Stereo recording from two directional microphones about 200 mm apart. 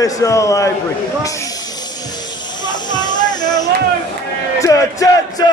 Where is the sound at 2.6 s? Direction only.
20° left (ahead or behind).